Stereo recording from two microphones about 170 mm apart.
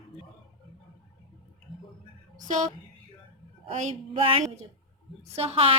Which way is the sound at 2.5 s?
50° right (ahead or behind).